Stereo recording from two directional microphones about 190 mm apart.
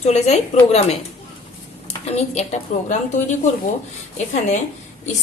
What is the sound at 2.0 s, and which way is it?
A woman's voice, 35° left (ahead or behind).